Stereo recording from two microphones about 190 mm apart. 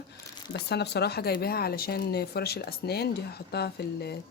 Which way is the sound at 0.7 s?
60° left (ahead or behind).